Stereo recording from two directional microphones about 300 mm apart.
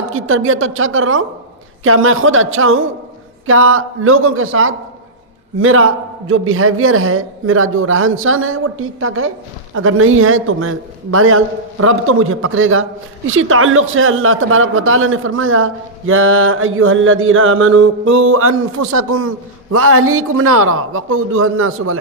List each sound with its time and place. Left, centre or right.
0.1 s a man's voice: right